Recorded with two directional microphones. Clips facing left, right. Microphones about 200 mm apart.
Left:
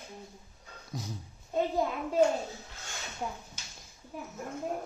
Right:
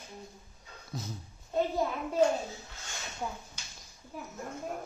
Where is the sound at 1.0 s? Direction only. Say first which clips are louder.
Even; 15° left (ahead or behind).